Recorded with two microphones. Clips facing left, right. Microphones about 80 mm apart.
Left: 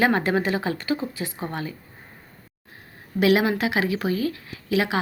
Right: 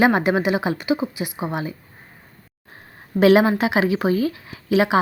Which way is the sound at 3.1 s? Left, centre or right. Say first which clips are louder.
Right 5 dB; right.